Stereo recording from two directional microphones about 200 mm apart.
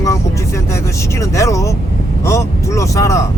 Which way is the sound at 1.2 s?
15° left (ahead or behind).